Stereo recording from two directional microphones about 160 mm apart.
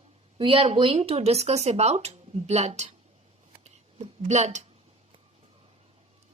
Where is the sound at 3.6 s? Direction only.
45° right (ahead or behind).